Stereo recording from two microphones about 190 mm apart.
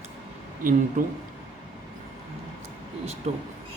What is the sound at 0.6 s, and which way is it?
Speech, 45° right (ahead or behind).